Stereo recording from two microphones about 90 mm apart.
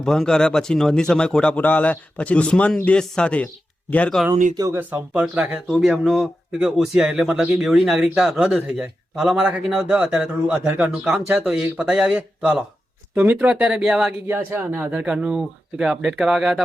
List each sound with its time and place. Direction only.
0.0 s speech: 5° left (ahead or behind)
4.7 s a man's voice: 25° right (ahead or behind)
5.7 s speech: centre (ahead or behind)
14.3 s a man's voice: 25° right (ahead or behind); by 16.6 s 5° right (ahead or behind)